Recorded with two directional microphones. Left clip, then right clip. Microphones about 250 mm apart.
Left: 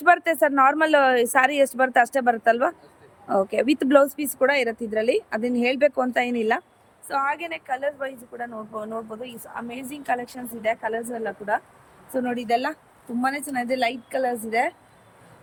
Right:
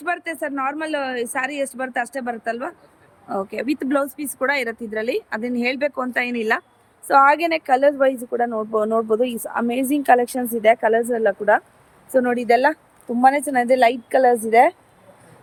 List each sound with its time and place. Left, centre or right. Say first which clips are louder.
0.0 s speech: left 7 dB; centre
7.1 s a woman's voice: right 11 dB; right